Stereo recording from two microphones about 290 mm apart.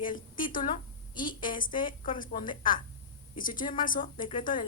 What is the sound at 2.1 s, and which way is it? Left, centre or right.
Speech, left.